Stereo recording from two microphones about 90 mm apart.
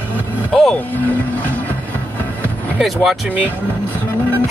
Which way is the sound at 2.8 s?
Centre (ahead or behind).